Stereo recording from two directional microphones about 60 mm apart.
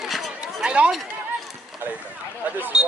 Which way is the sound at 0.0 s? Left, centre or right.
Centre.